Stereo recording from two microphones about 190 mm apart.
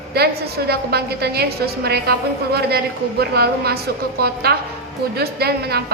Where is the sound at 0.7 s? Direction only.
55° right (ahead or behind).